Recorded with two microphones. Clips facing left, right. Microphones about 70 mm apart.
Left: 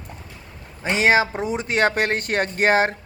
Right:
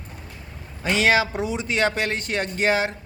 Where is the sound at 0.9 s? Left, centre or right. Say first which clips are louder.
Left 2 dB; left.